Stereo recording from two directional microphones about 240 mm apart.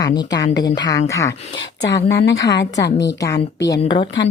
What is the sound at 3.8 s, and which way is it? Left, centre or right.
Speech, centre.